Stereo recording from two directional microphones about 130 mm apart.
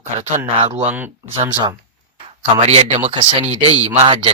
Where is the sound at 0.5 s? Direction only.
40° right (ahead or behind).